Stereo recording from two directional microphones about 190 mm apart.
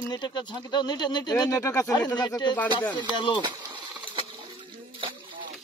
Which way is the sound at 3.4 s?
25° right (ahead or behind).